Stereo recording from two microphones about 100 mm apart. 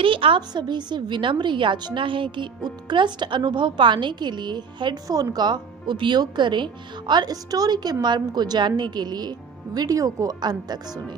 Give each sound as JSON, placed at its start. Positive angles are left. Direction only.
{"t": 0.0, "sound": "a woman's voice", "side_deg": -60}
{"t": 5.0, "sound": "a woman's voice", "side_deg": -40}